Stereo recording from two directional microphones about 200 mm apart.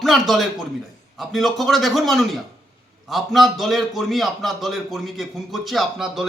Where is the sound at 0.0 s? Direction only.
Centre (ahead or behind).